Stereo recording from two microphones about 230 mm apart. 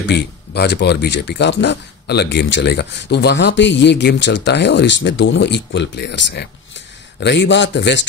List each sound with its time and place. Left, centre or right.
0.1 s speech: left
7.2 s speech: left